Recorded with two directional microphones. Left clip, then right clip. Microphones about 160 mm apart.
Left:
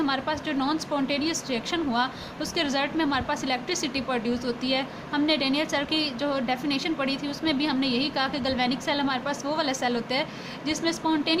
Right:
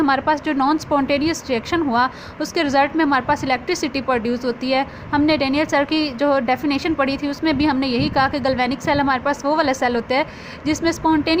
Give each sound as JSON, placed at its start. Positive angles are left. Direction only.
{"t": 0.0, "sound": "a woman's voice", "side_deg": -45}